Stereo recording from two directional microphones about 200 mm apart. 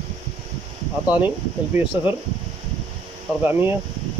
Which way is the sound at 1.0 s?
10° right (ahead or behind).